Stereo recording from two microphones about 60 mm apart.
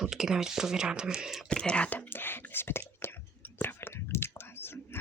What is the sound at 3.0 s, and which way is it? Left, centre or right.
Whispering, left.